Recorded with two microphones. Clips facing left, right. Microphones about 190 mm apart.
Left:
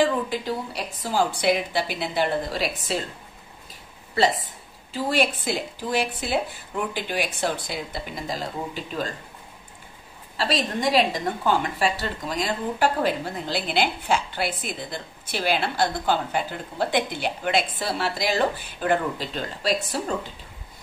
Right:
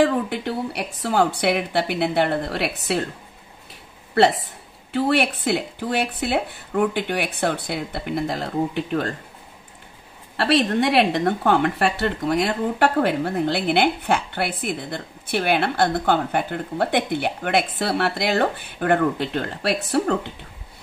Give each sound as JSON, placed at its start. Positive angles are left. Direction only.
{"t": 0.0, "sound": "speech", "side_deg": -60}
{"t": 4.1, "sound": "speech", "side_deg": -65}
{"t": 10.3, "sound": "speech", "side_deg": -65}